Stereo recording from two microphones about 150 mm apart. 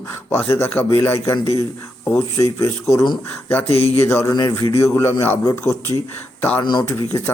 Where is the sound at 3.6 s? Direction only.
40° left (ahead or behind).